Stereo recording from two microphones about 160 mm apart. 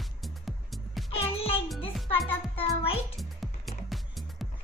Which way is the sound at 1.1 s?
35° left (ahead or behind).